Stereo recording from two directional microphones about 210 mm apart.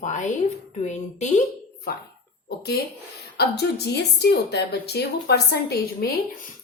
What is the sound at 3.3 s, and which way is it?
Speech, 50° left (ahead or behind).